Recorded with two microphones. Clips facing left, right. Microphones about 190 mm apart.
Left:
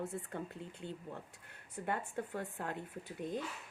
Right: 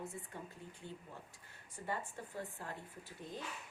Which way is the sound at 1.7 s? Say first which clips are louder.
Left 5 dB; 60° left (ahead or behind).